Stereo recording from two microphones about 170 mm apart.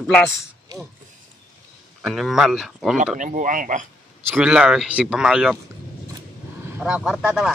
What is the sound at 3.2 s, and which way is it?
Speech, 50° right (ahead or behind).